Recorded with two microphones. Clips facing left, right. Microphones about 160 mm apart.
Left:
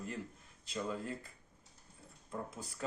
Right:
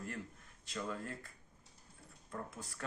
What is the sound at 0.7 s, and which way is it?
Speech, 20° left (ahead or behind).